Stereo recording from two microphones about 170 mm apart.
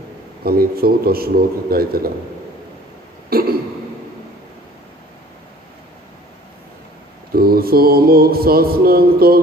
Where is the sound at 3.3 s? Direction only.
60° right (ahead or behind).